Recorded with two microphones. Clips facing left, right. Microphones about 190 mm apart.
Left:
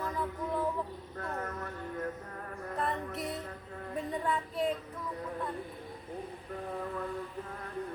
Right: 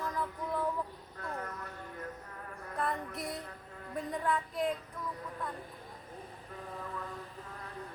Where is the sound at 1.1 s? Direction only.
45° left (ahead or behind).